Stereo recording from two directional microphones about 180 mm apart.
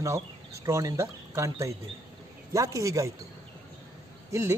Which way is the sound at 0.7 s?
15° right (ahead or behind).